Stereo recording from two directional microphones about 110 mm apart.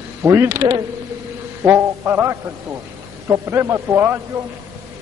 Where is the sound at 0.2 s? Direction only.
25° right (ahead or behind).